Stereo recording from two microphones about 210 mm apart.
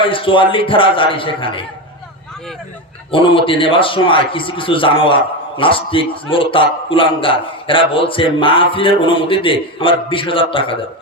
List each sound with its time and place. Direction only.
0.0 s a man's voice: 25° left (ahead or behind)
3.1 s a man's voice: 25° left (ahead or behind)